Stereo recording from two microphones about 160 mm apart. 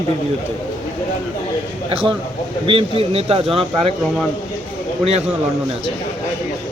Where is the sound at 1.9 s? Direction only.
35° right (ahead or behind).